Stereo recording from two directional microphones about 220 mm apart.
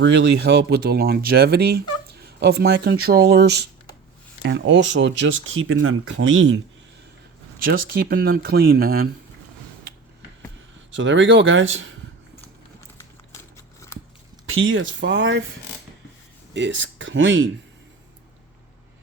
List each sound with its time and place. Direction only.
0.0 s speech: 55° right (ahead or behind)
7.6 s speech: 40° right (ahead or behind)
10.9 s speech: 60° right (ahead or behind)
14.4 s speech: 65° right (ahead or behind)
16.6 s speech: 55° right (ahead or behind)